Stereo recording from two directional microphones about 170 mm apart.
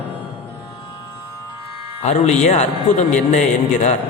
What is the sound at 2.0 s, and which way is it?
A man's voice, 40° left (ahead or behind).